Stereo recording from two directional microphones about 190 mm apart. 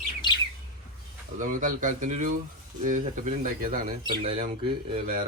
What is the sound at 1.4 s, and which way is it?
Speech, 45° right (ahead or behind).